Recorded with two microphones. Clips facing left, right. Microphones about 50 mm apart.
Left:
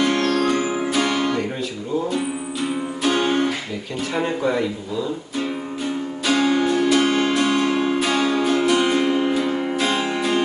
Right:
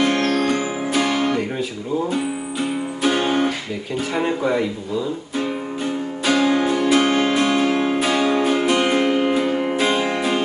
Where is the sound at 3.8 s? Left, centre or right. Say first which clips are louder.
Right 2 dB; centre.